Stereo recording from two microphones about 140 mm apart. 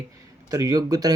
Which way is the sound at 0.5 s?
25° right (ahead or behind).